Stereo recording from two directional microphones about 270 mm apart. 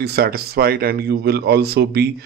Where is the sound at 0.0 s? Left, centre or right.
Right.